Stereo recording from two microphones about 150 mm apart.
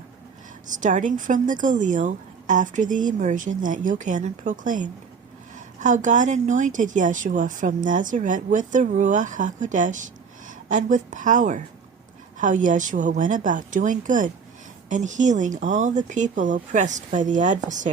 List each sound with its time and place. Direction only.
0.7 s a woman's voice: 60° right (ahead or behind)